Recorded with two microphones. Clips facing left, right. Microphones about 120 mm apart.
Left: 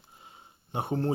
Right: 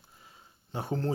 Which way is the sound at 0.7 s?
20° left (ahead or behind).